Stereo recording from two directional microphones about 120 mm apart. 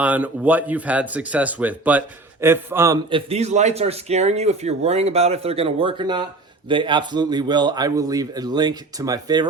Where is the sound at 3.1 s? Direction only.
45° right (ahead or behind).